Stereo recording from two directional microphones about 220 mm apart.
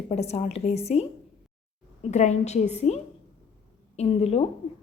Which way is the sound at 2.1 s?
30° left (ahead or behind).